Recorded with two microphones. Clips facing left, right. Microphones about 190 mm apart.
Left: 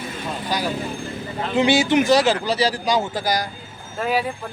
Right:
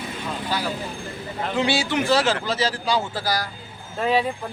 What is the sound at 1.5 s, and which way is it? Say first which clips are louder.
Speech: left 6 dB; 20° left (ahead or behind).